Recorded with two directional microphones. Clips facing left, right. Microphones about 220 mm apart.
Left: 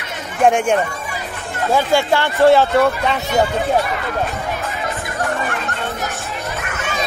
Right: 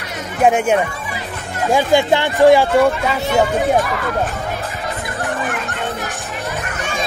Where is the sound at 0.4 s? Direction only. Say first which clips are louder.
Even; 5° right (ahead or behind).